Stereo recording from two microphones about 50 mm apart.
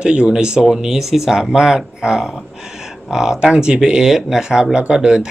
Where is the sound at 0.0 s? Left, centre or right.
Right.